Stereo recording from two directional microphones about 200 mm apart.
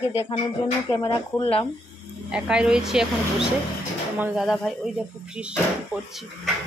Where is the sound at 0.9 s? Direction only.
25° left (ahead or behind).